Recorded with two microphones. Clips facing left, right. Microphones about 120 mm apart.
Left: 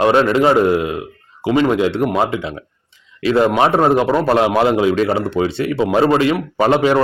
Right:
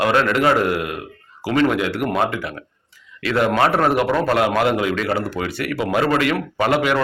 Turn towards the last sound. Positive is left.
turn(degrees=30)  # may be behind; listen again after turning